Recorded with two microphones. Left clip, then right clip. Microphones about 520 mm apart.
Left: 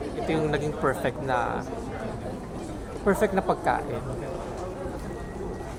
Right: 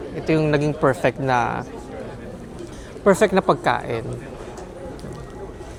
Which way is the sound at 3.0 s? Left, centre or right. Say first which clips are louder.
Right 8 dB; right.